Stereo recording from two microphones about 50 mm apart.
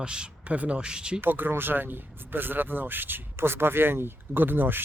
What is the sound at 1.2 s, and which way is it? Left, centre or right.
Speech, right.